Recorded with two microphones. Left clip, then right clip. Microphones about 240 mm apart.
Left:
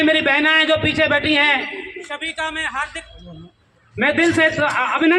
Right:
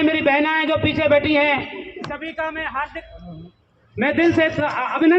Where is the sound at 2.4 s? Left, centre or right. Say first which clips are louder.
Left 1 dB; left.